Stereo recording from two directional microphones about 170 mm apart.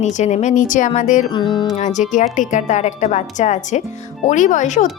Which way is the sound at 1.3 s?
30° left (ahead or behind).